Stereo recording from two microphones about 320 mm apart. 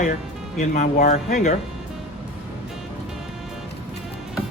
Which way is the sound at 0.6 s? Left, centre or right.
Left.